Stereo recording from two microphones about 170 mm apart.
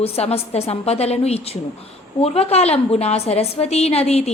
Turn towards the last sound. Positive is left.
turn(degrees=35)  # may be behind; listen again after turning